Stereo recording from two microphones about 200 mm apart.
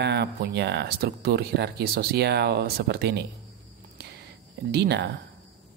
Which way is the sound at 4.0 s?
55° right (ahead or behind).